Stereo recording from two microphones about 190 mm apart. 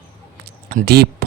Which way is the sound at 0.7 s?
55° right (ahead or behind).